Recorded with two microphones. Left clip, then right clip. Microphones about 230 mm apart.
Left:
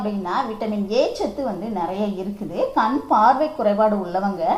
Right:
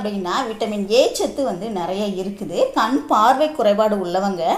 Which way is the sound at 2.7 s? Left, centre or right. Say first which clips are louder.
Left 2 dB; right.